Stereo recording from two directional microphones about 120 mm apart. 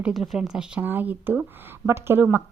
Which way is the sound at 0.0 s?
Centre (ahead or behind).